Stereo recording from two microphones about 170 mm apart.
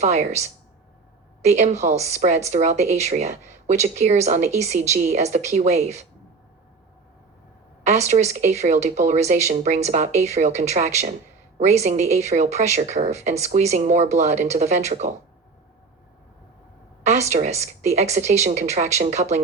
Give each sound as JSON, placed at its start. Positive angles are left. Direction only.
{"t": 0.0, "sound": "speech", "side_deg": -40}
{"t": 7.9, "sound": "speech", "side_deg": -40}
{"t": 17.0, "sound": "speech", "side_deg": -40}